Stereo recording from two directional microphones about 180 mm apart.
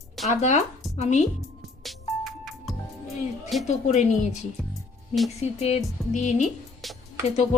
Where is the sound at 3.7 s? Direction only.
40° left (ahead or behind).